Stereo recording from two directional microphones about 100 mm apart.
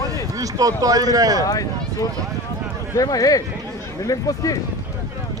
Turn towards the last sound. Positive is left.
turn(degrees=35)  # may be behind; listen again after turning